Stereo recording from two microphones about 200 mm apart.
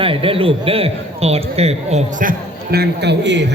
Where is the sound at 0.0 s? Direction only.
25° right (ahead or behind).